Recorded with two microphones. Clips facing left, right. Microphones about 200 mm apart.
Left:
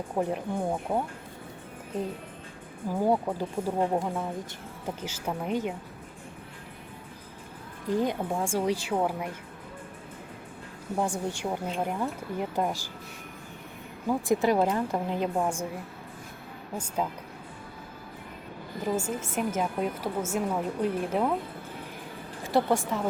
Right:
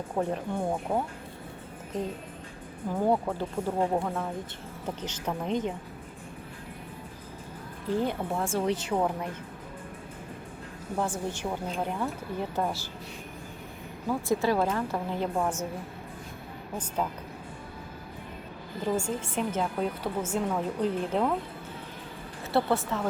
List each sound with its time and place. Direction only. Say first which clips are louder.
0.2 s speech: left 1 dB; 5° left (ahead or behind)
2.9 s a woman's voice: left 1 dB; 10° left (ahead or behind)
7.9 s a woman's voice: left 1 dB; 15° left (ahead or behind)
10.9 s a woman's voice: left 1 dB; 15° left (ahead or behind)
14.4 s a woman's voice: left 2 dB; 20° left (ahead or behind)
16.7 s a woman's voice: left 1 dB; 10° left (ahead or behind)
18.8 s a woman's voice: even; 5° left (ahead or behind)
22.5 s a woman's voice: left 1 dB; 10° left (ahead or behind)